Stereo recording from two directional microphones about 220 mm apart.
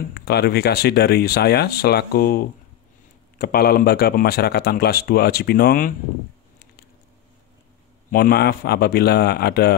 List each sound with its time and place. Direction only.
0.1 s speech: 45° left (ahead or behind)
8.1 s speech: 45° left (ahead or behind)